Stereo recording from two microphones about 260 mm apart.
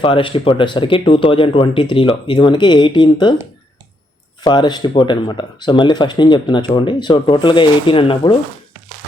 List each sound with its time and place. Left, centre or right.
0.0 s speech: centre
4.4 s speech: centre